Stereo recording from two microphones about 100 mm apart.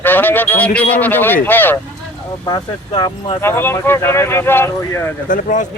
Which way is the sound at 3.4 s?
25° left (ahead or behind).